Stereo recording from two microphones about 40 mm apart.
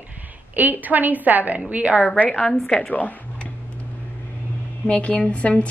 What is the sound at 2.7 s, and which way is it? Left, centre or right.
Speech, left.